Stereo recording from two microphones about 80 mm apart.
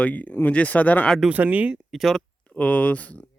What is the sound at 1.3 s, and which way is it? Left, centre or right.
Speech, right.